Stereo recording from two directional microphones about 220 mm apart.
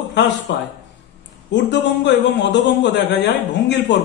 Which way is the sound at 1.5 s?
55° left (ahead or behind).